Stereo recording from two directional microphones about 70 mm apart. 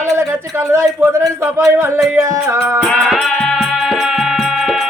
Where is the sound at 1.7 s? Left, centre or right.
Right.